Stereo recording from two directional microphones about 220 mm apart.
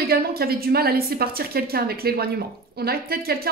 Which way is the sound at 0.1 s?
45° right (ahead or behind).